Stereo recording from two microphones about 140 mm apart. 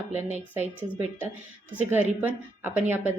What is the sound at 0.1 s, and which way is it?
Speech, 55° right (ahead or behind).